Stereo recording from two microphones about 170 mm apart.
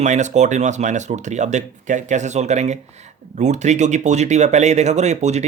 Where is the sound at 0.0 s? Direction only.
45° right (ahead or behind).